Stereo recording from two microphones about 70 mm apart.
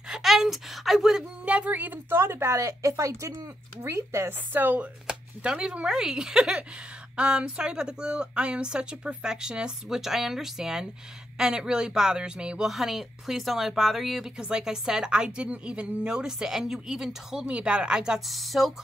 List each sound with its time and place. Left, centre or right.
0.1 s speech: centre
1.4 s a woman's voice: centre; by 3.3 s right
3.8 s a woman's voice: right
5.0 s speech: centre